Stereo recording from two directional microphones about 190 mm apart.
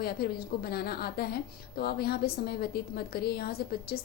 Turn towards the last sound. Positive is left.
turn(degrees=55)  # may be behind; listen again after turning